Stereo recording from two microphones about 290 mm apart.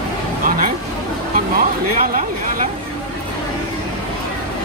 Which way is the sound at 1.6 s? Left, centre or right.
Right.